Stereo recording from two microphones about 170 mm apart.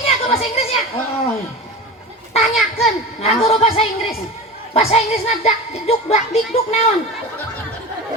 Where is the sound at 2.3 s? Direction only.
35° left (ahead or behind).